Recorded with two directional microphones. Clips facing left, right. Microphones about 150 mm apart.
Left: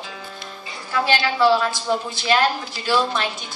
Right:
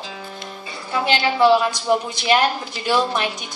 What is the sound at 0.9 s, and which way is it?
A woman's voice, 20° right (ahead or behind).